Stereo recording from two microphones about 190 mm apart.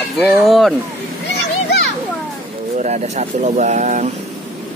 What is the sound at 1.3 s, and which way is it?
Children playing, 60° left (ahead or behind).